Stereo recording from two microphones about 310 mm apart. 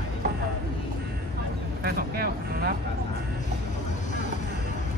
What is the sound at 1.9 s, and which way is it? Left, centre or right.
Vehicle, right.